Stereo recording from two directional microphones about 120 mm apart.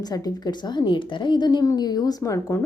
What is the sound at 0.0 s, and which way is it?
Speech, 30° left (ahead or behind).